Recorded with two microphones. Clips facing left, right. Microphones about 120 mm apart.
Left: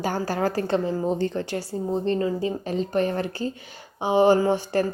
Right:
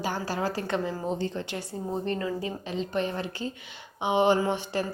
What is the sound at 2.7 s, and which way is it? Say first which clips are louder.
A woman's voice: left 5 dB; 45° left (ahead or behind).